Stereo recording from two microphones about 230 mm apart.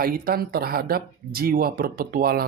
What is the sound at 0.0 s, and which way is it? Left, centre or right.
Speech, right.